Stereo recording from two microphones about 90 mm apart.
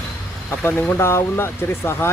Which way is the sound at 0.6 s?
20° left (ahead or behind).